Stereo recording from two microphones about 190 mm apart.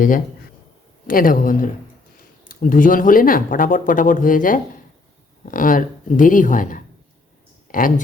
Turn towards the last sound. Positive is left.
turn(degrees=45)  # may be behind; listen again after turning